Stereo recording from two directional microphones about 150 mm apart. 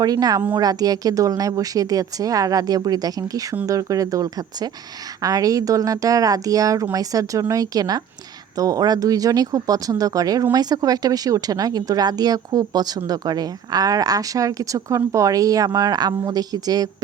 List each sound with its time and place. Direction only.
0.0 s speech: 25° right (ahead or behind)